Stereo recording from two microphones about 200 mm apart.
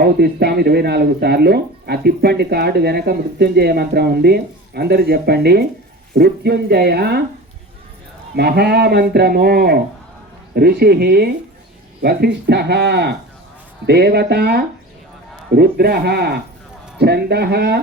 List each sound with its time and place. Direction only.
0.0 s speech: 55° right (ahead or behind)
8.4 s speech: 55° right (ahead or behind)